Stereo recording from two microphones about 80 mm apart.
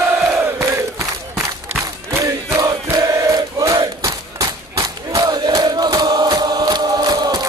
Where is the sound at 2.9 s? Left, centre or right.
Right.